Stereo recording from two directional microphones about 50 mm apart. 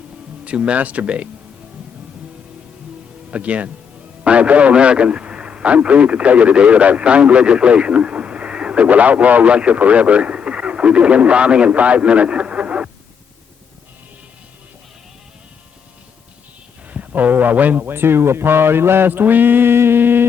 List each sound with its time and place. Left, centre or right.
0.4 s speech: right
3.2 s a man's voice: right
16.9 s speech: right